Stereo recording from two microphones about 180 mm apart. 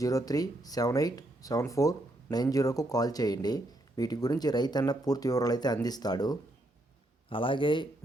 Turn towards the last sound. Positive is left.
turn(degrees=25)  # may be behind; listen again after turning